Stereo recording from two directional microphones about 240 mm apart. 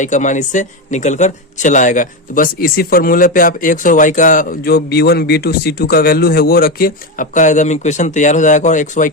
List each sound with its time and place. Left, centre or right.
0.0 s a man's voice: left